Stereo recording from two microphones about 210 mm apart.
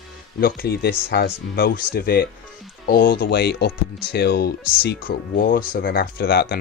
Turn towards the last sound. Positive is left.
turn(degrees=50)  # may be behind; listen again after turning